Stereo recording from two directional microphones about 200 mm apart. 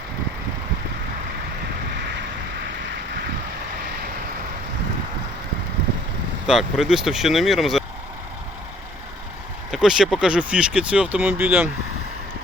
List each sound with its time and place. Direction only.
6.5 s speech: 5° right (ahead or behind)
9.7 s speech: centre (ahead or behind)